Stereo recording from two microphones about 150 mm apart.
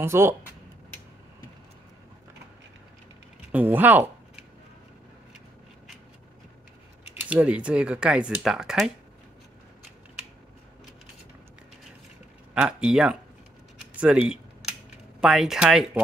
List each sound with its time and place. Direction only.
0.0 s speech: 15° right (ahead or behind)
3.5 s speech: 10° right (ahead or behind)
7.2 s speech: 10° right (ahead or behind)
12.5 s speech: 5° right (ahead or behind)
13.9 s a sound: 10° right (ahead or behind)
15.1 s speech: 5° right (ahead or behind)